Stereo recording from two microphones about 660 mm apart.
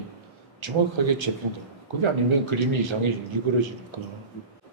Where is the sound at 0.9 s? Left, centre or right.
Right.